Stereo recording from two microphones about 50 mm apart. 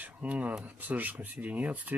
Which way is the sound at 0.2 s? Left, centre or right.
Right.